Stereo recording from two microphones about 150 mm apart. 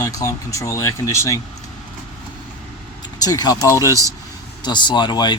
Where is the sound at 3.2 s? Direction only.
25° left (ahead or behind).